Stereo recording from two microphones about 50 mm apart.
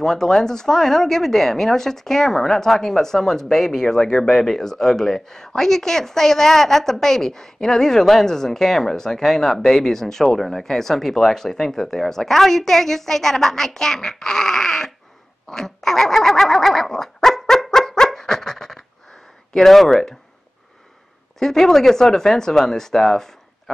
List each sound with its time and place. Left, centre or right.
0.0 s speech: centre
15.4 s a sound: centre
19.5 s speech: centre
21.4 s speech: centre